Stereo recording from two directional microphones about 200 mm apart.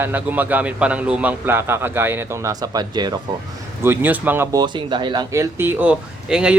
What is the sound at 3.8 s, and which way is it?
Speech, 10° right (ahead or behind).